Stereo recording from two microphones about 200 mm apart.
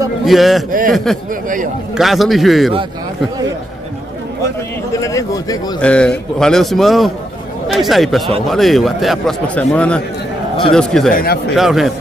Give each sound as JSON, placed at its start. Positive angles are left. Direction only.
{"t": 0.2, "sound": "a man's voice", "side_deg": 0}
{"t": 0.7, "sound": "speech", "side_deg": -45}
{"t": 2.0, "sound": "a man's voice", "side_deg": 0}
{"t": 5.0, "sound": "speech", "side_deg": 15}
{"t": 5.8, "sound": "a man's voice", "side_deg": 5}